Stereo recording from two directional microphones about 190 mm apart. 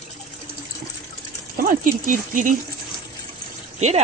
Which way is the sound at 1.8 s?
45° right (ahead or behind).